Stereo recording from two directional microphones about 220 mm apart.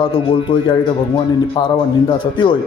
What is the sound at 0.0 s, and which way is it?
Speech, 20° left (ahead or behind).